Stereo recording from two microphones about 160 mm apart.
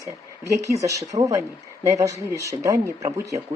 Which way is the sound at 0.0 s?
20° right (ahead or behind).